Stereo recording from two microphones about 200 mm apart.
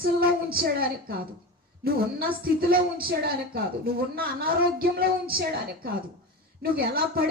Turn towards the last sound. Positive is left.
turn(degrees=-50)  # may be behind; listen again after turning